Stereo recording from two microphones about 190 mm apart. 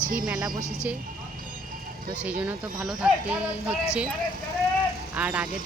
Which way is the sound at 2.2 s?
5° right (ahead or behind).